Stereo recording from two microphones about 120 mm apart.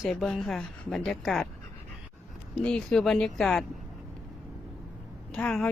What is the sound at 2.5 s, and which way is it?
Speech, 5° left (ahead or behind).